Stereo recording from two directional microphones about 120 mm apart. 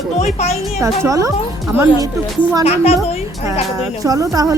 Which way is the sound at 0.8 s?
25° right (ahead or behind).